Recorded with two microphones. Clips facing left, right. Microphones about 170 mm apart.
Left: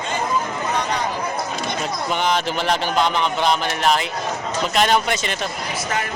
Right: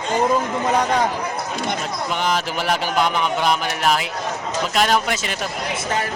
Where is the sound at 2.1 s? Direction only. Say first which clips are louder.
Left 1 dB; centre (ahead or behind).